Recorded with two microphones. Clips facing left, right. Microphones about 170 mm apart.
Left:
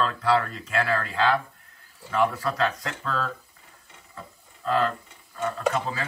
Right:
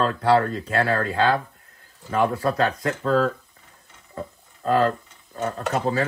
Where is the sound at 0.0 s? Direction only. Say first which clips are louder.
Right 4 dB; 30° right (ahead or behind).